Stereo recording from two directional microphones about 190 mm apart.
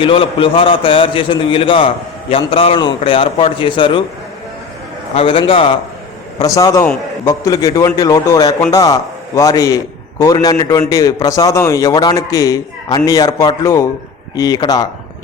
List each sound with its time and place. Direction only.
0.0 s a man's voice: 30° left (ahead or behind)
5.1 s a man's voice: 25° left (ahead or behind)
6.4 s a man's voice: 15° left (ahead or behind)